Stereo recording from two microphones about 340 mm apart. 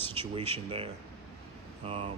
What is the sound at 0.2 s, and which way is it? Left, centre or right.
Speech, centre.